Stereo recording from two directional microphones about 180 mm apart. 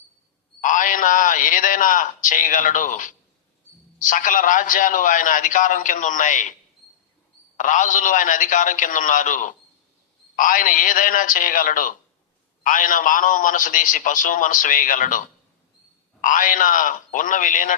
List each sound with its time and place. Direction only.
0.6 s a man's voice: 45° left (ahead or behind)
7.5 s a man's voice: 45° left (ahead or behind)
16.2 s a man's voice: 45° left (ahead or behind)